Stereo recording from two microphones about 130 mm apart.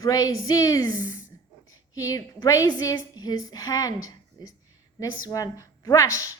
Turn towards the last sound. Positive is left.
turn(degrees=25)  # may be behind; listen again after turning